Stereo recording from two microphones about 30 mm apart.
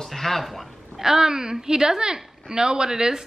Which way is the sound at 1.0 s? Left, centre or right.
Centre.